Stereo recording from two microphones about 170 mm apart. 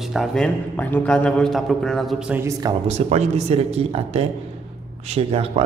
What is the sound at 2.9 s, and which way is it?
Speech, 40° right (ahead or behind).